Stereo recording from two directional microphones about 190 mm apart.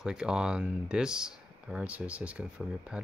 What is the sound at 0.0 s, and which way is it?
Speech, 5° right (ahead or behind).